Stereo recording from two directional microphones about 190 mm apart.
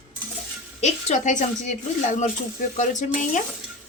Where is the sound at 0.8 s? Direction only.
40° left (ahead or behind).